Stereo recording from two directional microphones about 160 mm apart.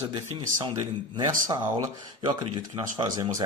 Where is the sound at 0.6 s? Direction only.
25° right (ahead or behind).